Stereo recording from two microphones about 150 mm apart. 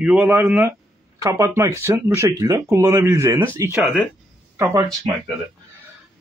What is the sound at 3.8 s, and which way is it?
Speech, centre (ahead or behind).